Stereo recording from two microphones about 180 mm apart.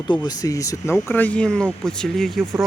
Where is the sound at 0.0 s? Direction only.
25° left (ahead or behind).